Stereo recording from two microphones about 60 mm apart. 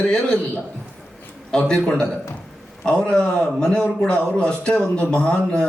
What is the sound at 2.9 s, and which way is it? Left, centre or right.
A man's voice, centre.